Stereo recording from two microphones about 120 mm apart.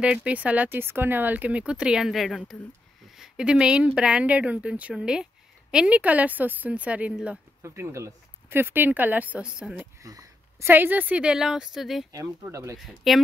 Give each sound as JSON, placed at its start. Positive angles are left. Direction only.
{"t": 0.0, "sound": "speech", "side_deg": -10}
{"t": 7.6, "sound": "speech", "side_deg": -20}
{"t": 10.0, "sound": "a sound", "side_deg": -30}
{"t": 10.7, "sound": "speech", "side_deg": -15}
{"t": 12.1, "sound": "speech", "side_deg": -25}
{"t": 12.7, "sound": "speech", "side_deg": 0}